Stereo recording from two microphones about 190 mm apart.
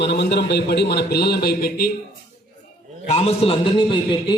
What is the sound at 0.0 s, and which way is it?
A man's voice, 65° left (ahead or behind).